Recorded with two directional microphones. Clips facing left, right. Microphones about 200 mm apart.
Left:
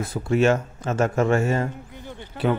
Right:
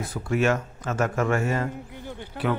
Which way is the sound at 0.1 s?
25° left (ahead or behind).